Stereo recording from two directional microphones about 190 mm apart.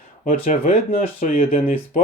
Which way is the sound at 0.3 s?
45° left (ahead or behind).